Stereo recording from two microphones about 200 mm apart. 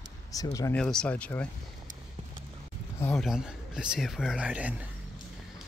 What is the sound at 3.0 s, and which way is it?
Speech, 10° left (ahead or behind).